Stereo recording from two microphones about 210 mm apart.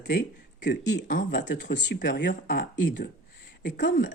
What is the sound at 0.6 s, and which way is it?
Speech, 55° left (ahead or behind).